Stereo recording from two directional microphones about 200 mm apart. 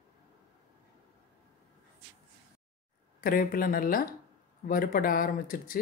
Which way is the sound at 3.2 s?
45° left (ahead or behind).